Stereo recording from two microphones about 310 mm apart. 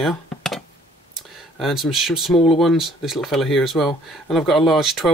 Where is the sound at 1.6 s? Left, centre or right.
Centre.